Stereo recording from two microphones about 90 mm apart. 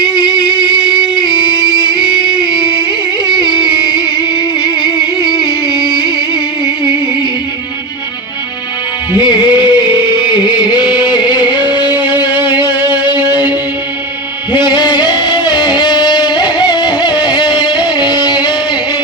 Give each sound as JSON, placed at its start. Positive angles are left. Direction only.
{"t": 0.0, "sound": "music", "side_deg": 55}
{"t": 9.1, "sound": "music", "side_deg": 50}
{"t": 14.5, "sound": "music", "side_deg": 55}